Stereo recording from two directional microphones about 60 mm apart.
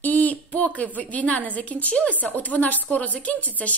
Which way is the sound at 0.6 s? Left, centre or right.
Left.